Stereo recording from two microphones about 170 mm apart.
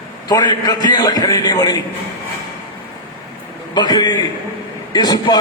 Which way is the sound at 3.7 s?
25° left (ahead or behind).